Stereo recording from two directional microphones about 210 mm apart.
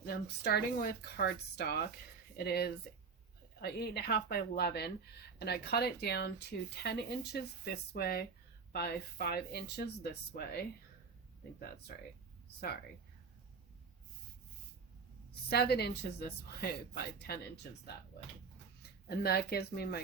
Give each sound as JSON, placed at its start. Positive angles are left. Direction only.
{"t": 0.0, "sound": "speech", "side_deg": 50}
{"t": 15.4, "sound": "speech", "side_deg": 50}
{"t": 19.0, "sound": "speech", "side_deg": 50}